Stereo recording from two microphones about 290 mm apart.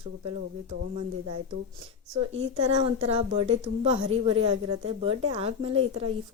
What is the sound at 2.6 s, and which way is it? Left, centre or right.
Speech, centre.